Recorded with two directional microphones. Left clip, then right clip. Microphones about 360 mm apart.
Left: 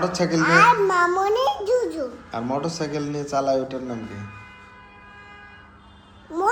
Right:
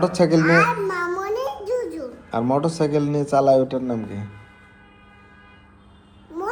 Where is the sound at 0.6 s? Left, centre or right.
Centre.